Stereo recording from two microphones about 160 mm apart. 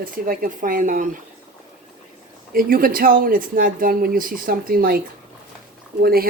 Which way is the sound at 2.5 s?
65° right (ahead or behind).